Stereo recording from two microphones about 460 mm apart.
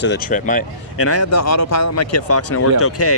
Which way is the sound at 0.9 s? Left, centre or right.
Left.